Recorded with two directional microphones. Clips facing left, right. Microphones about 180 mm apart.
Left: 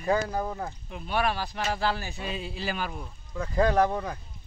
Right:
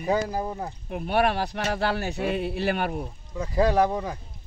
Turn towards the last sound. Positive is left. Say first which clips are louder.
# right 2 dB
turn(degrees=-10)  # may be behind; listen again after turning